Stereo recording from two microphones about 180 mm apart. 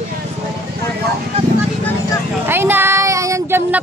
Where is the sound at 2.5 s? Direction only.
10° right (ahead or behind).